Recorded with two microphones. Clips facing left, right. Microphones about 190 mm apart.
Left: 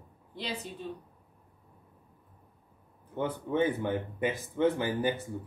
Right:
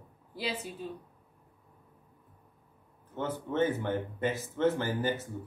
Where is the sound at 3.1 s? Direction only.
15° left (ahead or behind).